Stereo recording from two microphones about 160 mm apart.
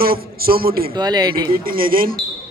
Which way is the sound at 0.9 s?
25° right (ahead or behind).